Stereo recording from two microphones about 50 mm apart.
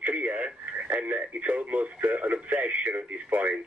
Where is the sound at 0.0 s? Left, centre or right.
Right.